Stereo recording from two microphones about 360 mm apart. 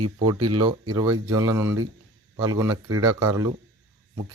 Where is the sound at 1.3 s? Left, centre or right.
Centre.